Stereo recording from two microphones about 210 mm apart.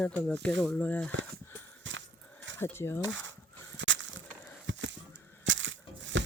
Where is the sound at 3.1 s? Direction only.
60° right (ahead or behind).